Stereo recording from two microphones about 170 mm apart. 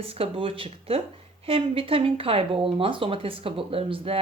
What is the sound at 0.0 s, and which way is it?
Speech, 35° right (ahead or behind).